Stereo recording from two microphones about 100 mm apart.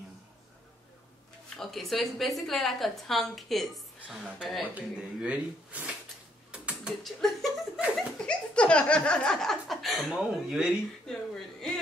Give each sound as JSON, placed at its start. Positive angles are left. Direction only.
{"t": 1.6, "sound": "speech", "side_deg": 0}
{"t": 6.5, "sound": "mechanisms", "side_deg": -10}
{"t": 7.0, "sound": "speech", "side_deg": 0}